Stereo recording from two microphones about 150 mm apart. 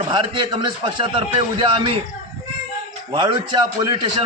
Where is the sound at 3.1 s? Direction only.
35° right (ahead or behind).